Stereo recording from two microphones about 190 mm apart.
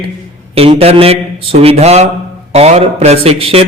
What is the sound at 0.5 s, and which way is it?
Mantra, 30° right (ahead or behind).